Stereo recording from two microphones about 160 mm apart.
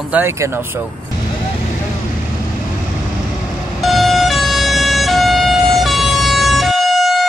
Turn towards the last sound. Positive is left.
turn(degrees=0)  # may be behind; listen again after turning